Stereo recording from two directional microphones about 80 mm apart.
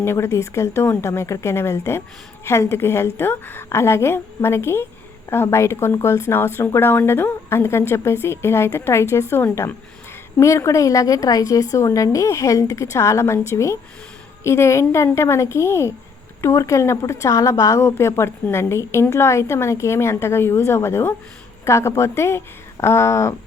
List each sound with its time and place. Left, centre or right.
0.0 s a woman's voice: left